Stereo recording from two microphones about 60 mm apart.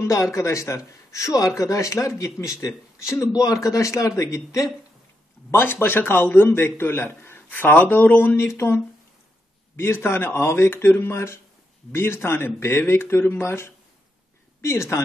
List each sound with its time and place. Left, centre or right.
0.0 s speech: left
5.5 s a man's voice: left
8.5 s a man's voice: left